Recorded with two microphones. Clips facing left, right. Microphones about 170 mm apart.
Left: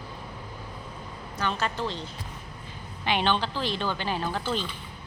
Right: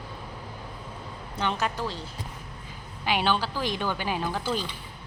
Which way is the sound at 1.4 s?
15° right (ahead or behind).